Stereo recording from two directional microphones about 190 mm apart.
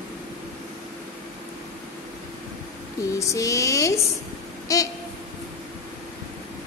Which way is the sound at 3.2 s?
15° left (ahead or behind).